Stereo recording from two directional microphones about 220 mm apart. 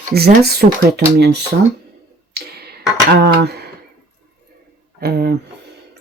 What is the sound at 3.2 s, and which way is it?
Speech, 45° right (ahead or behind).